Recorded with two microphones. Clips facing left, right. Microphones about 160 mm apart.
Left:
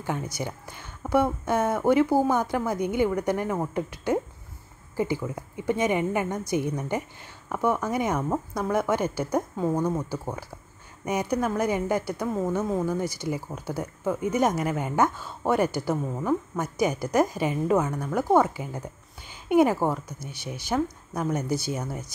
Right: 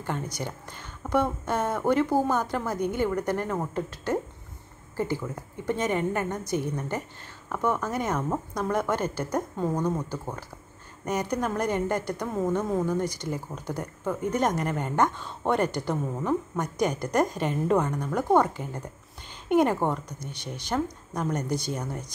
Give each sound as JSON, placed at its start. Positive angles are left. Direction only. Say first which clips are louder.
{"t": 0.0, "sound": "a woman's voice", "louder": "left 2 dB", "side_deg": 10}